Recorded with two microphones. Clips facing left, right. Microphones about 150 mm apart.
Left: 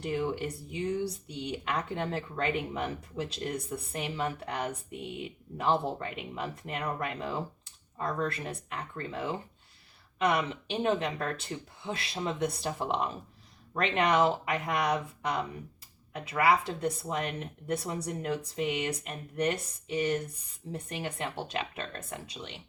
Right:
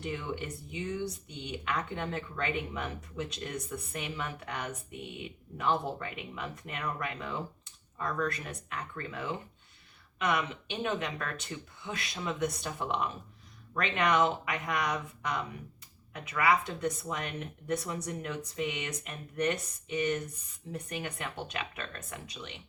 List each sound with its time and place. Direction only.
0.0 s speech: 35° left (ahead or behind)